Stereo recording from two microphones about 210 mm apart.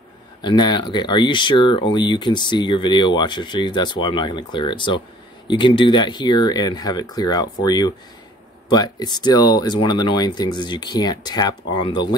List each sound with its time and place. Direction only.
0.4 s speech: 20° left (ahead or behind)